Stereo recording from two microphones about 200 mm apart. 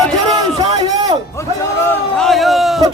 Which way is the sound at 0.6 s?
20° right (ahead or behind).